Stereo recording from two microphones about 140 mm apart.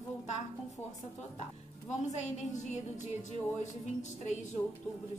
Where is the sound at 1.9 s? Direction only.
55° left (ahead or behind).